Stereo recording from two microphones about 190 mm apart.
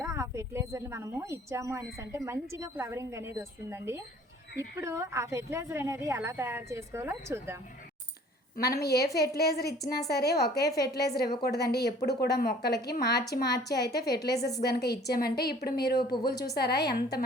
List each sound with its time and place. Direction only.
0.0 s speech: 15° right (ahead or behind)
8.5 s a woman's voice: 55° left (ahead or behind)